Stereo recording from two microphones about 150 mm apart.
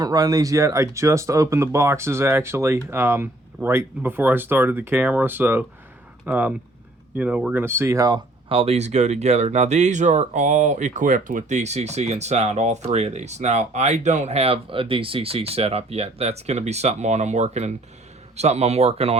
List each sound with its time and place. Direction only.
0.0 s speech: 25° right (ahead or behind)
8.4 s speech: 40° right (ahead or behind)